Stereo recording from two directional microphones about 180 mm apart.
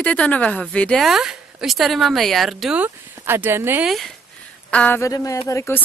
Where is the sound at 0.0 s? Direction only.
5° left (ahead or behind); by 3.9 s 10° right (ahead or behind).